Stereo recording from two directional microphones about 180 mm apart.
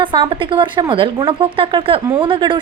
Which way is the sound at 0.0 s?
25° right (ahead or behind).